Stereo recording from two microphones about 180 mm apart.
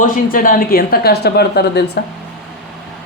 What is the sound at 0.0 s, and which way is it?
Speech, 50° left (ahead or behind).